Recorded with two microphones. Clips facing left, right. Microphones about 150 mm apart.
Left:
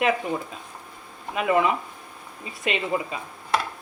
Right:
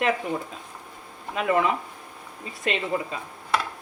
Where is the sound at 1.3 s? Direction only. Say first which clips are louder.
Left 1 dB; 15° left (ahead or behind).